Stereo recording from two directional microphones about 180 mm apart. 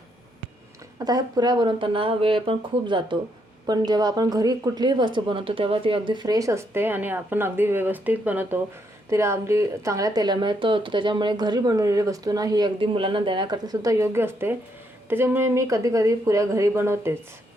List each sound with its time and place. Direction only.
0.9 s speech: 20° right (ahead or behind)